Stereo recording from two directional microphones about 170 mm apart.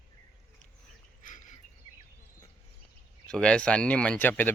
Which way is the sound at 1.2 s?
50° left (ahead or behind).